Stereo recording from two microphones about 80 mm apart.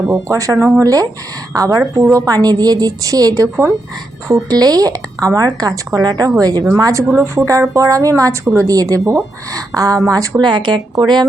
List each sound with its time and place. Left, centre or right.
0.1 s speech: right
10.4 s speech: right